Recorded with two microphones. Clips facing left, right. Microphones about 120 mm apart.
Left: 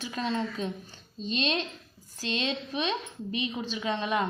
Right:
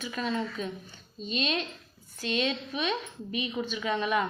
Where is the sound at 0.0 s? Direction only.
30° left (ahead or behind).